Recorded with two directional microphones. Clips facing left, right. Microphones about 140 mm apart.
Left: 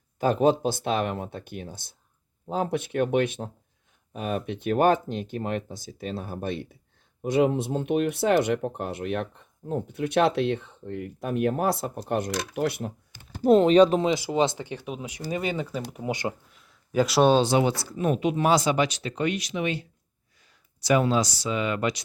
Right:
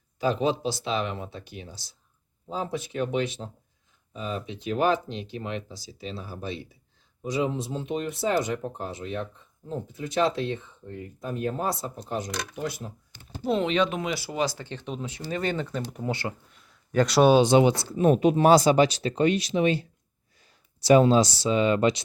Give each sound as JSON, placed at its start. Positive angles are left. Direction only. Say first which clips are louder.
{"t": 0.2, "sound": "speech", "louder": "left 4 dB", "side_deg": 50}
{"t": 12.3, "sound": "speech", "louder": "left 4 dB", "side_deg": 5}
{"t": 12.5, "sound": "speech", "louder": "left 7 dB", "side_deg": 65}
{"t": 13.4, "sound": "speech", "louder": "left 8 dB", "side_deg": 40}
{"t": 14.1, "sound": "speech", "louder": "left 5 dB", "side_deg": 20}
{"t": 16.5, "sound": "a sound", "louder": "right 2 dB", "side_deg": 0}
{"t": 17.4, "sound": "speech", "louder": "right 4 dB", "side_deg": -20}
{"t": 18.0, "sound": "speech", "louder": "right 4 dB", "side_deg": -35}